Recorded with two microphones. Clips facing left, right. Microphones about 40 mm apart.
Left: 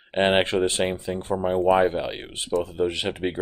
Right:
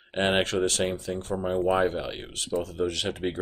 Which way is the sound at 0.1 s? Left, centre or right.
Left.